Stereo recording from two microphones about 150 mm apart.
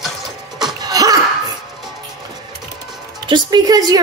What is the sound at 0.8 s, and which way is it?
Laughter, 25° right (ahead or behind).